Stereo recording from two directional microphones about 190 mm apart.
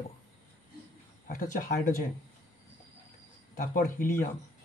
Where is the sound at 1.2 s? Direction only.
45° left (ahead or behind).